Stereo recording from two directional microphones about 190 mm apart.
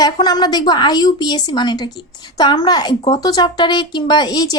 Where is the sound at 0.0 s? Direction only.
20° left (ahead or behind).